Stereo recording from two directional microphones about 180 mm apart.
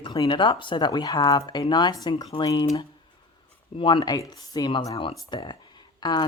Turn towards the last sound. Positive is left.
turn(degrees=25)  # may be behind; listen again after turning